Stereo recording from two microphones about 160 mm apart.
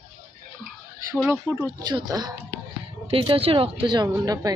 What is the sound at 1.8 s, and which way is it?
A woman's voice, 25° right (ahead or behind).